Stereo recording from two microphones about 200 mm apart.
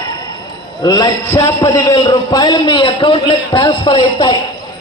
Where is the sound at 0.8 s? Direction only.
20° left (ahead or behind).